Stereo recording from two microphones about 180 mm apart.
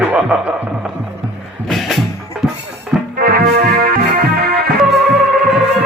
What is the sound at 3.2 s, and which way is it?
Music, 60° right (ahead or behind).